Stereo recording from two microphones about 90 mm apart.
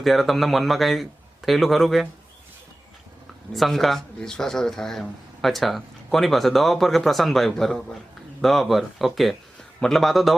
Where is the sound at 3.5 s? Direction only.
Centre (ahead or behind).